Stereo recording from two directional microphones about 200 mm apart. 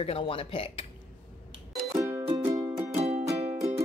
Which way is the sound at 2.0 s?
15° right (ahead or behind).